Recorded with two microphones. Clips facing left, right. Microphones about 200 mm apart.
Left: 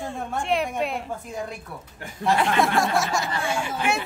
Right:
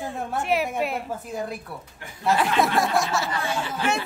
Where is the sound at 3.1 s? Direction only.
15° left (ahead or behind).